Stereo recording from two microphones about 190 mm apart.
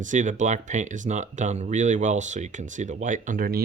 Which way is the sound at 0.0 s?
40° right (ahead or behind).